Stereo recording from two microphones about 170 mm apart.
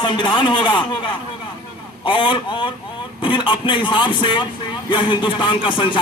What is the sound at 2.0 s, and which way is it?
A man's voice, 30° left (ahead or behind).